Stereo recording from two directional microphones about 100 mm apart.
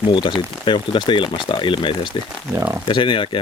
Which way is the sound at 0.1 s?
55° left (ahead or behind).